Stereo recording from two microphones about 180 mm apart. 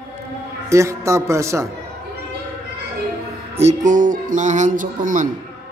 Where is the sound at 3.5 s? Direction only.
40° right (ahead or behind).